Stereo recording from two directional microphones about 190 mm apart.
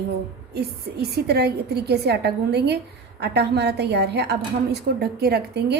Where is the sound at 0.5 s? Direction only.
55° right (ahead or behind).